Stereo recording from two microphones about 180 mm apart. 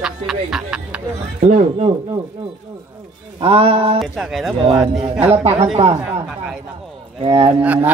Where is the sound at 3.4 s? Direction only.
30° right (ahead or behind).